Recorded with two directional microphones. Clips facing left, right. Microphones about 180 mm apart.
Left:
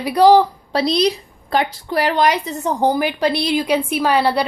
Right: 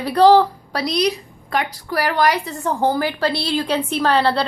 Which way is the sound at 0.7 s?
30° left (ahead or behind).